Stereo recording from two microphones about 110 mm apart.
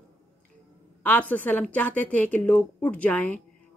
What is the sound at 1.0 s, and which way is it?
A woman's voice, 15° left (ahead or behind).